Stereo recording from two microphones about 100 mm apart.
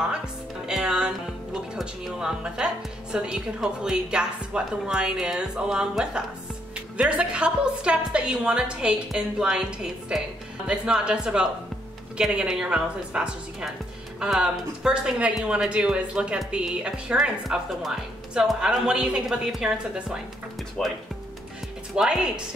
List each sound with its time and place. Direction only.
0.7 s speech: 5° right (ahead or behind)
20.8 s speech: 5° left (ahead or behind)
21.9 s speech: 5° right (ahead or behind)